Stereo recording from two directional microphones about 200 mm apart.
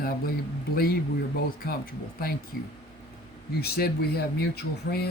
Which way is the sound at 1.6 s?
45° left (ahead or behind).